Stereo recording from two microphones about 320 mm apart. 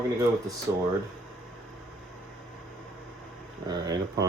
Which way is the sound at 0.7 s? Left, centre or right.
Centre.